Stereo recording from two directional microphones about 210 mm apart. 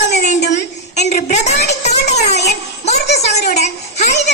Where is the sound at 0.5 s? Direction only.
35° left (ahead or behind).